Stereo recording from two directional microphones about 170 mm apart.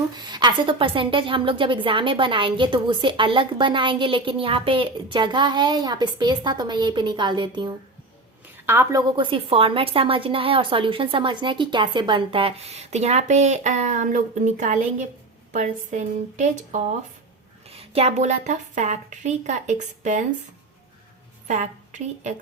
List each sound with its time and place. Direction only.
0.2 s a woman's voice: 25° right (ahead or behind)
8.6 s a woman's voice: 15° right (ahead or behind); by 20.2 s 45° right (ahead or behind)
21.4 s a woman's voice: 45° right (ahead or behind)